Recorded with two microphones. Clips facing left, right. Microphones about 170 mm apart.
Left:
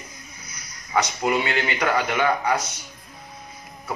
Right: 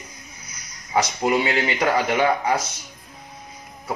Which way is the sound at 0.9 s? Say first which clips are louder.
Right 2 dB; 30° right (ahead or behind).